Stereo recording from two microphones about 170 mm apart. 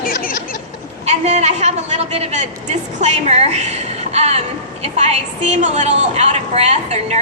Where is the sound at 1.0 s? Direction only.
40° right (ahead or behind).